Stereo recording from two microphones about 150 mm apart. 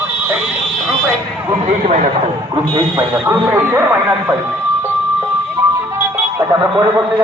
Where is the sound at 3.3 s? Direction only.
15° right (ahead or behind).